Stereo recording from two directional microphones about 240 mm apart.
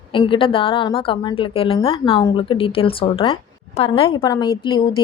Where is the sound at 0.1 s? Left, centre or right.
Left.